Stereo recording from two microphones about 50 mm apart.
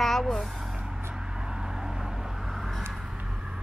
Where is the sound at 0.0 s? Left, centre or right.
Centre.